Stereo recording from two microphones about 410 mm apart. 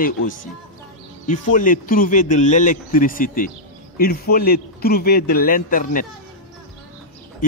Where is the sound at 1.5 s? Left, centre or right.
Centre.